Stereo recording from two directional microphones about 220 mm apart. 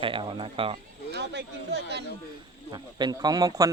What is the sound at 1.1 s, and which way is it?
Speech, 50° right (ahead or behind).